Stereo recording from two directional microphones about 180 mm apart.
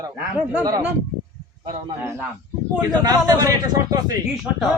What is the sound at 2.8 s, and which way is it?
A man's voice, 20° right (ahead or behind).